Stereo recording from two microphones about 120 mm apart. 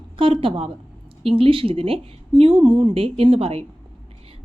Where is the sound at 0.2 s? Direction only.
50° right (ahead or behind).